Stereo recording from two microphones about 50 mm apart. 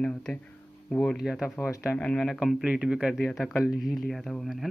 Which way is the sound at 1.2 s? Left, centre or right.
Centre.